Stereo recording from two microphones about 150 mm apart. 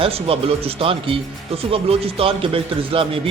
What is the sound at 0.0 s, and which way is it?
Speech, 40° right (ahead or behind).